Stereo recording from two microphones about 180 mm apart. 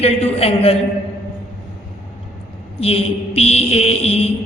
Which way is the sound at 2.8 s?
35° left (ahead or behind).